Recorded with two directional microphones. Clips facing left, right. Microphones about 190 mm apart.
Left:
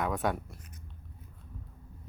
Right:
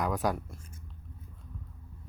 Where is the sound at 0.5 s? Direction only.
25° right (ahead or behind).